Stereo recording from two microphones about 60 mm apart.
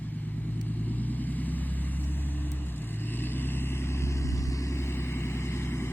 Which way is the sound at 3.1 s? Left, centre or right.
Left.